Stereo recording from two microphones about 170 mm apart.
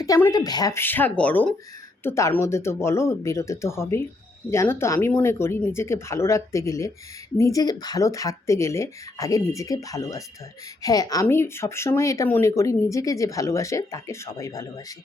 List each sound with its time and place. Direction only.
0.0 s speech: 20° left (ahead or behind)